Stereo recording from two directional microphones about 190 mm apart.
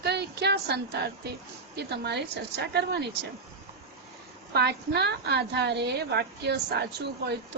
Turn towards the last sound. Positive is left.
turn(degrees=-60)  # may be behind; listen again after turning